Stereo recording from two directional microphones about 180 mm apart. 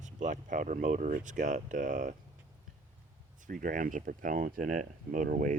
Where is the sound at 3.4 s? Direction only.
50° right (ahead or behind).